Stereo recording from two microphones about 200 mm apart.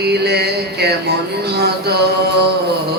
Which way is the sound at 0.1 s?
55° right (ahead or behind).